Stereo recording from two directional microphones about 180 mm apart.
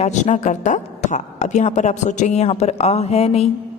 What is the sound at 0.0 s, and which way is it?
Speech, 40° left (ahead or behind).